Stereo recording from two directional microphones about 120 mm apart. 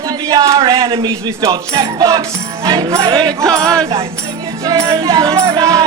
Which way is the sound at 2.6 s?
30° right (ahead or behind).